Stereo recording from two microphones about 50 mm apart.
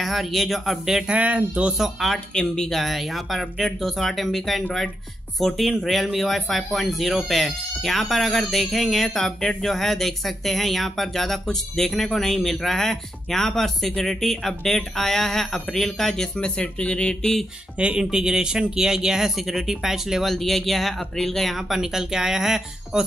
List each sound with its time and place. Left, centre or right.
0.0 s speech: centre
1.0 s speech: right
2.0 s speech: centre
2.3 s speech: centre
16.3 s speech: left
17.7 s speech: right